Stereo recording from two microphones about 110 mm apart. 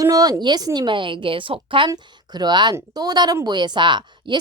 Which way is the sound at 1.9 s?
40° right (ahead or behind).